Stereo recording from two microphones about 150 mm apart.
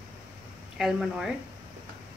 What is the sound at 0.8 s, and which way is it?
Speech, 5° right (ahead or behind).